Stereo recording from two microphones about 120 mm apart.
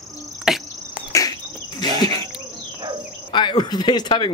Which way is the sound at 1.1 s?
30° left (ahead or behind).